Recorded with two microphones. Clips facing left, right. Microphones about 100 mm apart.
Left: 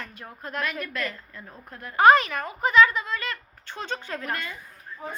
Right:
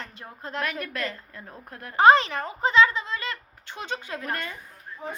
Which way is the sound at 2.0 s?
25° right (ahead or behind).